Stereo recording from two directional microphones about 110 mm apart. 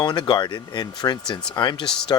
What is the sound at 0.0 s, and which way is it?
Speech, 40° left (ahead or behind).